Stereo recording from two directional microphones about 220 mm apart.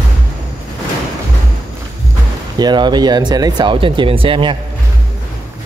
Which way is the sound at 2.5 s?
20° right (ahead or behind).